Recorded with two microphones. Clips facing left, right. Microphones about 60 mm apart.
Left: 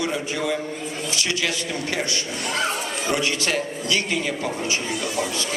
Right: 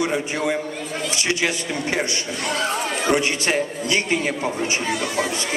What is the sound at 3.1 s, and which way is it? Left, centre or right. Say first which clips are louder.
A man's voice: right 3 dB; right.